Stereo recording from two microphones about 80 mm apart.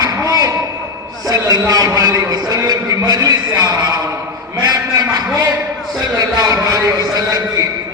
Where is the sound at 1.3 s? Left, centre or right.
Right.